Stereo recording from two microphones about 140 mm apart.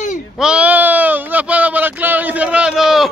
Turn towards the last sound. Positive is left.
turn(degrees=0)  # may be behind; listen again after turning